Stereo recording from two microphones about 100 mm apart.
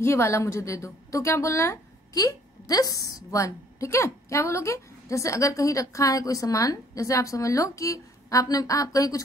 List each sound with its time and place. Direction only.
0.0 s a woman's voice: 25° left (ahead or behind)